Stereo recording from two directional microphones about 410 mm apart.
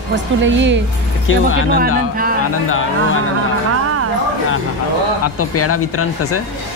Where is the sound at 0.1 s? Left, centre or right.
Right.